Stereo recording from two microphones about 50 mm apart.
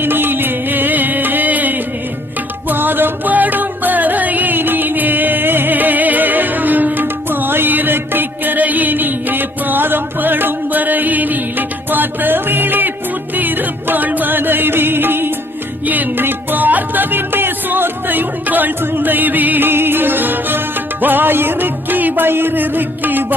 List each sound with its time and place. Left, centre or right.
0.0 s music: right